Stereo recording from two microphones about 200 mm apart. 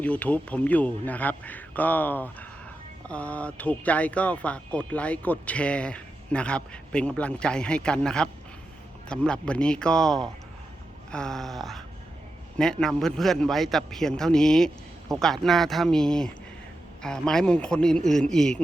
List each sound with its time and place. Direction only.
0.0 s a man's voice: 5° left (ahead or behind)